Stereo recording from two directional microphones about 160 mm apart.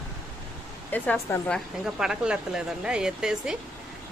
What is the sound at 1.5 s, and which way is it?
Speech, 5° right (ahead or behind).